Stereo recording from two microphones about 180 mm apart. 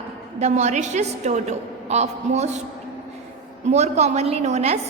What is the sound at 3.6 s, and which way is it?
A woman's voice, 40° right (ahead or behind).